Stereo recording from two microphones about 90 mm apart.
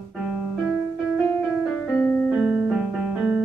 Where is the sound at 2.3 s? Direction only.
5° right (ahead or behind).